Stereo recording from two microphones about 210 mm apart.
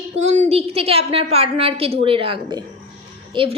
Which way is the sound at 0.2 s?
30° right (ahead or behind).